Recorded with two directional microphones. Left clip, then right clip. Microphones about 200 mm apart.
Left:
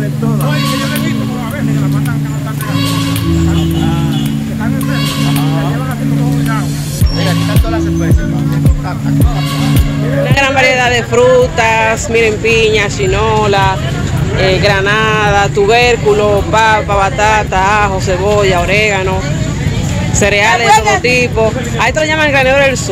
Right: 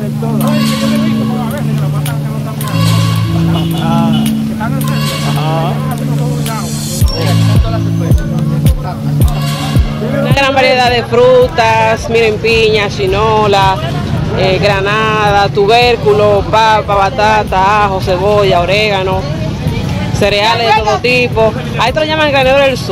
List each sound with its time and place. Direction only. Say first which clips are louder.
10.2 s speech: even; centre (ahead or behind)
20.2 s speech: left 1 dB; centre (ahead or behind)
20.7 s speech: left 2 dB; 35° left (ahead or behind)
21.0 s speech: right 1 dB; centre (ahead or behind)